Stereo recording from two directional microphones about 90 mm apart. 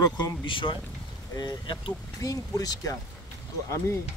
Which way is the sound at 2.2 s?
40° left (ahead or behind).